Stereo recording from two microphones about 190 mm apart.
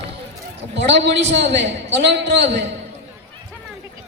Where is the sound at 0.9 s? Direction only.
65° right (ahead or behind).